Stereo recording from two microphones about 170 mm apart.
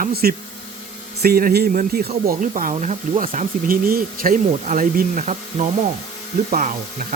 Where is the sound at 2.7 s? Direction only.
45° right (ahead or behind).